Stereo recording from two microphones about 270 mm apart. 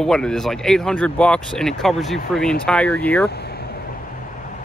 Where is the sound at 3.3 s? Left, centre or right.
Left.